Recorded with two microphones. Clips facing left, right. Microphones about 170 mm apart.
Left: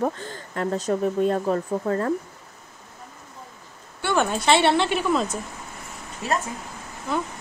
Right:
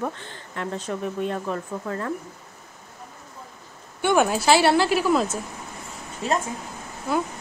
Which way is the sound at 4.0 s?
15° right (ahead or behind).